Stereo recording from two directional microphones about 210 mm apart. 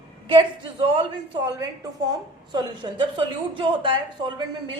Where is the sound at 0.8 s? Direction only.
25° right (ahead or behind).